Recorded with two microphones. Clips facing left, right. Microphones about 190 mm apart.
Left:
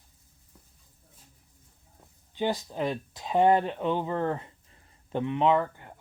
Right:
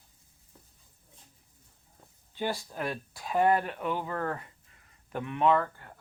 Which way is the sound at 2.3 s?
20° left (ahead or behind).